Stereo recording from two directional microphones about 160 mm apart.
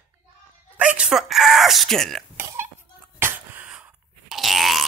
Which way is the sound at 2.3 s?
15° right (ahead or behind).